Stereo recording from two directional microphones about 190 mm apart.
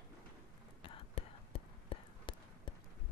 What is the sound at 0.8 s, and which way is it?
Whispering, 30° left (ahead or behind).